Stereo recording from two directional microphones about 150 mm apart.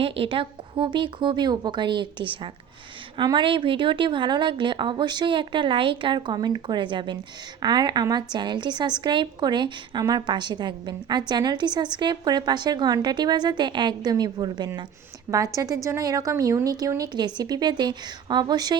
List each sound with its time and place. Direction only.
0.0 s a woman's voice: 40° right (ahead or behind)